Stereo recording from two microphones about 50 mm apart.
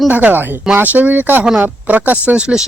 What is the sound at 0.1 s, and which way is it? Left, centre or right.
Speech, right.